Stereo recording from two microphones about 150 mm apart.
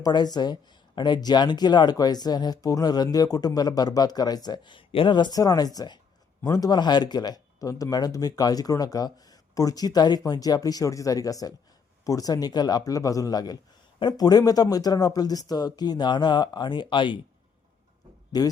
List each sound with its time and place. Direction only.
0.0 s speech: 25° left (ahead or behind)
18.3 s speech: 25° left (ahead or behind)